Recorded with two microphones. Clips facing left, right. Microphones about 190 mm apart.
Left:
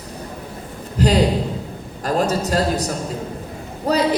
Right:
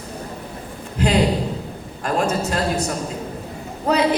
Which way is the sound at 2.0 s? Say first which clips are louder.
Left 1 dB; 40° left (ahead or behind).